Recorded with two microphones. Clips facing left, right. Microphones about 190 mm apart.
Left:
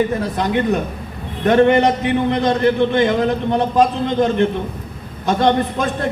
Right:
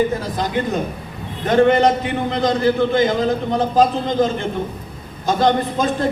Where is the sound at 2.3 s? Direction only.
65° left (ahead or behind).